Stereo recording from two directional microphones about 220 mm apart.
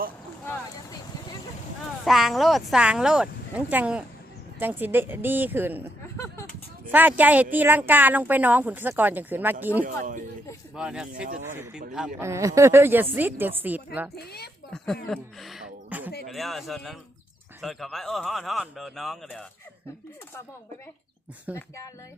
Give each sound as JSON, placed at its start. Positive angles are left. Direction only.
{"t": 2.0, "sound": "a woman's voice", "side_deg": 0}
{"t": 6.1, "sound": "a sound", "side_deg": 10}
{"t": 6.9, "sound": "a woman's voice", "side_deg": -10}
{"t": 9.8, "sound": "speech", "side_deg": -35}
{"t": 10.8, "sound": "a woman's voice", "side_deg": -5}
{"t": 14.2, "sound": "speech", "side_deg": 45}
{"t": 15.1, "sound": "speech", "side_deg": 0}
{"t": 21.5, "sound": "a woman's voice", "side_deg": -5}